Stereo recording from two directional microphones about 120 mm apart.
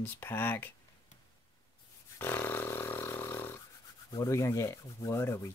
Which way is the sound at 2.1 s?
20° left (ahead or behind).